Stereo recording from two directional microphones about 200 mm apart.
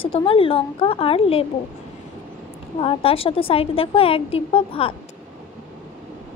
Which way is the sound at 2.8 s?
30° left (ahead or behind).